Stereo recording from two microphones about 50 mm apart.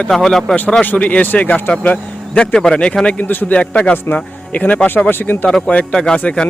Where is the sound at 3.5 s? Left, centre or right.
Left.